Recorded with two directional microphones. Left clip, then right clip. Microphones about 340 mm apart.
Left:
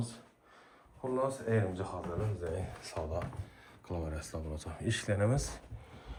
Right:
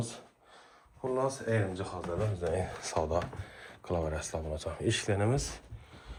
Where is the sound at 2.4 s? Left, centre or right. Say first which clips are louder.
Right 6 dB; centre.